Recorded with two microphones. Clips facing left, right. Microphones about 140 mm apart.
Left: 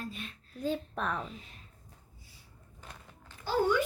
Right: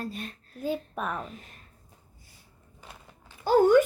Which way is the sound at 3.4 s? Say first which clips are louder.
Right 9 dB; 50° right (ahead or behind).